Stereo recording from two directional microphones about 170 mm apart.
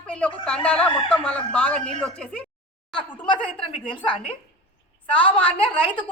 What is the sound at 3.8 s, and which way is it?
A woman's voice, 30° left (ahead or behind).